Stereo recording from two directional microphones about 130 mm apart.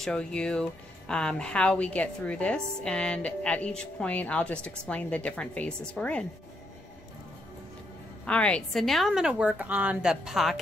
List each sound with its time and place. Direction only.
0.0 s speech: 5° left (ahead or behind)
8.3 s a woman's voice: 10° left (ahead or behind)